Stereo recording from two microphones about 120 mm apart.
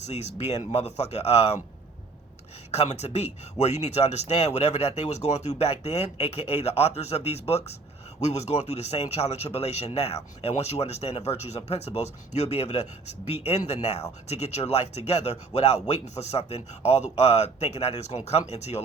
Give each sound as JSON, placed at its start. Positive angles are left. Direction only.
{"t": 0.1, "sound": "speech", "side_deg": 65}
{"t": 2.7, "sound": "speech", "side_deg": 65}